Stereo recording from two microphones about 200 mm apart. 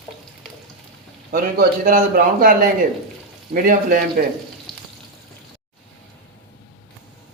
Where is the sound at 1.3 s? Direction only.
45° right (ahead or behind).